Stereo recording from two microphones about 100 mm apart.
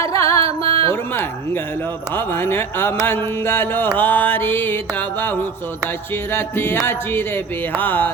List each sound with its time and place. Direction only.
0.0 s music: 30° left (ahead or behind)
0.6 s a sound: 70° right (ahead or behind)
2.1 s mantra: 20° left (ahead or behind)